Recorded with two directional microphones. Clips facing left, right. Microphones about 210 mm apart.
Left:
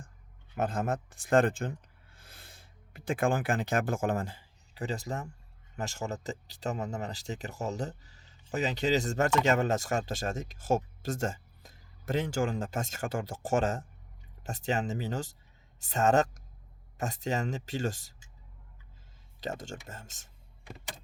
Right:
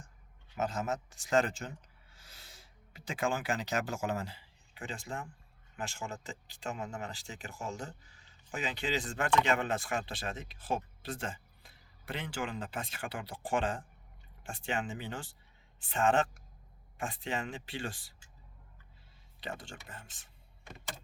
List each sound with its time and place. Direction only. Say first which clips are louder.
0.5 s speech: left 3 dB; 55° left (ahead or behind)
19.4 s speech: left 6 dB; 40° left (ahead or behind)